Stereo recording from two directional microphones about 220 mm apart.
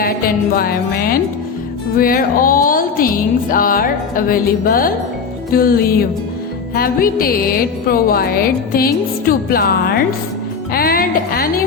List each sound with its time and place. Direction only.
0.0 s a woman's voice: 40° left (ahead or behind)
10.7 s music: 40° left (ahead or behind)